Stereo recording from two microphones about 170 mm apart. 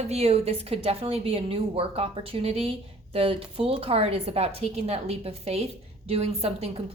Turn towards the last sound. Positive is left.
turn(degrees=-35)  # may be behind; listen again after turning